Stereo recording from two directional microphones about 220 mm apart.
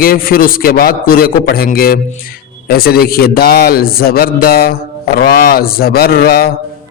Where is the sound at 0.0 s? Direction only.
40° left (ahead or behind).